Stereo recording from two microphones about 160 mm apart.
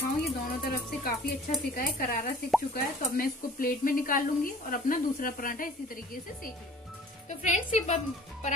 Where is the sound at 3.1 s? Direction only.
60° left (ahead or behind).